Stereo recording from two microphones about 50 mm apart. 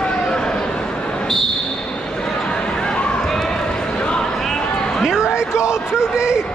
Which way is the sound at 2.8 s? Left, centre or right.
Centre.